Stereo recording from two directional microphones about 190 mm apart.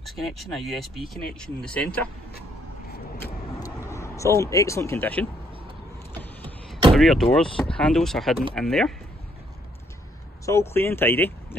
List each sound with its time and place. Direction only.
0.0 s speech: centre (ahead or behind)
3.2 s vehicle: 15° left (ahead or behind)
7.0 s speech: centre (ahead or behind)
10.4 s speech: 15° left (ahead or behind)